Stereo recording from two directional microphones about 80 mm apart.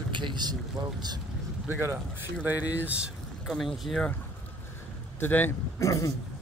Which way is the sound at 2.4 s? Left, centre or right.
Right.